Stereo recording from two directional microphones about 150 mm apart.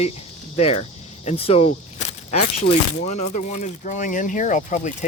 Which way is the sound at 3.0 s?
50° left (ahead or behind).